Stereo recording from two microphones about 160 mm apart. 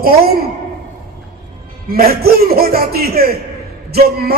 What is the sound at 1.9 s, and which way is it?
Music, 70° right (ahead or behind).